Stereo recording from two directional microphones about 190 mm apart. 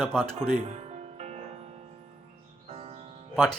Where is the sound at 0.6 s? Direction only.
30° right (ahead or behind).